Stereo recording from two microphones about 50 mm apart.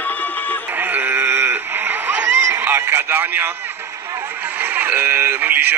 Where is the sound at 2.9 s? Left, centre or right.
Right.